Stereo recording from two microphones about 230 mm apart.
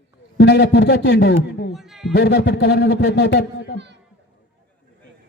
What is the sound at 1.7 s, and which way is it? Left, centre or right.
Speech, centre.